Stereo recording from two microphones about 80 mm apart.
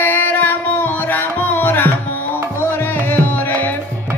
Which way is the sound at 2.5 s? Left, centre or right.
Left.